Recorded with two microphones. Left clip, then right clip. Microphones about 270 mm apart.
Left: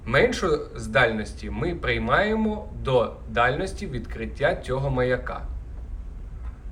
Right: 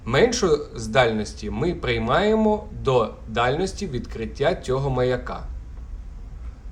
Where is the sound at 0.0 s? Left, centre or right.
Centre.